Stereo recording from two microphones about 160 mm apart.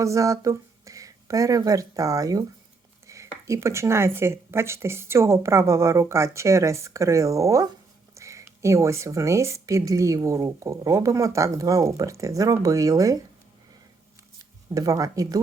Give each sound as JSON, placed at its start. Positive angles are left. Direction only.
{"t": 0.0, "sound": "speech", "side_deg": -20}
{"t": 14.7, "sound": "speech", "side_deg": -20}